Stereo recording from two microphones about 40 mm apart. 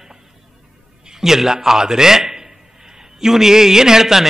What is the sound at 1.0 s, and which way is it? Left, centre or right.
A man's voice, centre.